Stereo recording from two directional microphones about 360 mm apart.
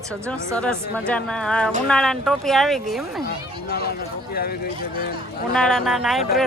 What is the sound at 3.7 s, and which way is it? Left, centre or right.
Speech, left.